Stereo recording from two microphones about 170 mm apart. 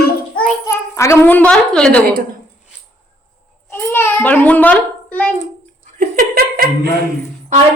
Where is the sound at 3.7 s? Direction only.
15° left (ahead or behind).